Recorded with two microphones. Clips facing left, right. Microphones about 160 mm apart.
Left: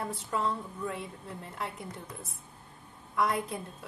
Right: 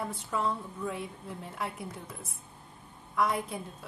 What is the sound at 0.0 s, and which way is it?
A woman's voice, centre (ahead or behind).